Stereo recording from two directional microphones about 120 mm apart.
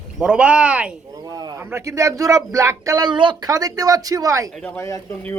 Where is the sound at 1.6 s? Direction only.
20° right (ahead or behind).